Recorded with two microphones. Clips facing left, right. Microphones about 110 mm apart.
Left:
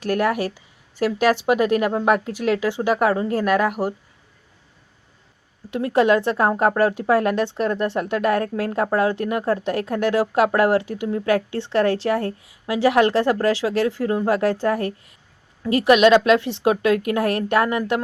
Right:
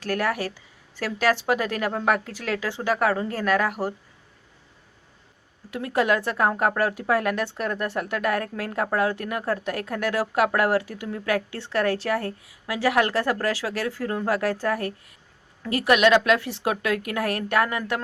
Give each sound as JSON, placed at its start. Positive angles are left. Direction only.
{"t": 0.0, "sound": "speech", "side_deg": 20}
{"t": 5.7, "sound": "speech", "side_deg": 25}